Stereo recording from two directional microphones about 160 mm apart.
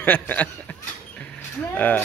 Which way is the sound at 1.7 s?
10° left (ahead or behind).